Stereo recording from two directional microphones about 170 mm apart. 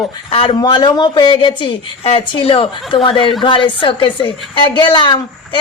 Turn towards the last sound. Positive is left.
turn(degrees=30)  # may be behind; listen again after turning